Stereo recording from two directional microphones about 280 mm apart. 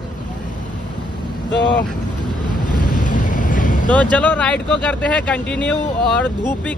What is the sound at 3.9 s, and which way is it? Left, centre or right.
A man's voice, centre.